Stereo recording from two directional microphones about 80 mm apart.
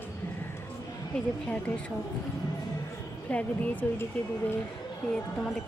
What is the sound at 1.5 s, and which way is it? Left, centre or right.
Speech, centre.